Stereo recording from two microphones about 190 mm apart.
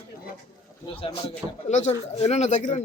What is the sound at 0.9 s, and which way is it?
Speech, 30° left (ahead or behind).